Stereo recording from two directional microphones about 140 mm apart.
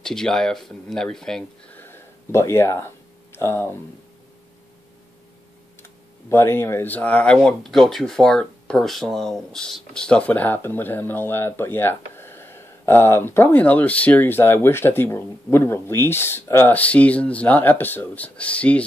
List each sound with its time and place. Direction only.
0.0 s speech: 5° left (ahead or behind)
1.8 s a sound: 15° left (ahead or behind)
5.8 s speech: 20° left (ahead or behind)